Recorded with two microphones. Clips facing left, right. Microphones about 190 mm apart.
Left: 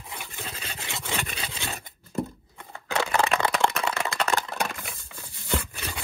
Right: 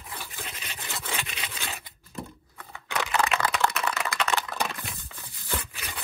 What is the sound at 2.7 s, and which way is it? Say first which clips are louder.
Computer keyboard: left 3 dB; 30° left (ahead or behind).